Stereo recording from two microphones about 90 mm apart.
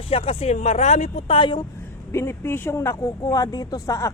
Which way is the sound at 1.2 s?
70° left (ahead or behind).